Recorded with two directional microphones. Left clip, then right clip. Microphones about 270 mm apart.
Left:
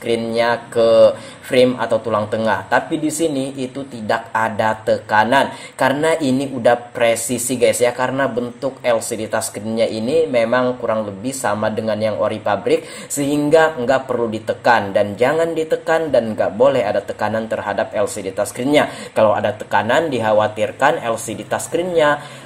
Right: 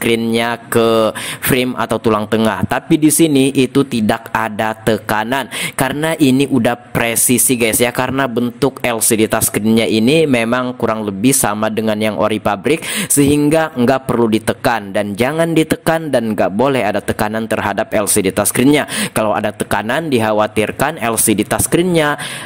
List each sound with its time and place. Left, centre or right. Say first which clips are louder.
0.0 s speech: right 2 dB; right